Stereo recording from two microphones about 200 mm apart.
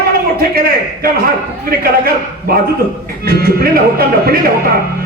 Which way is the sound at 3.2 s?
50° right (ahead or behind).